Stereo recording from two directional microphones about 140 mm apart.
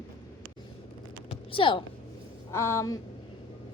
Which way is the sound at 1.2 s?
40° left (ahead or behind).